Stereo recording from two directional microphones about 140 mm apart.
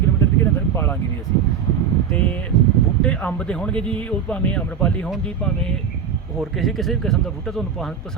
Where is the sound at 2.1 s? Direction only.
10° left (ahead or behind).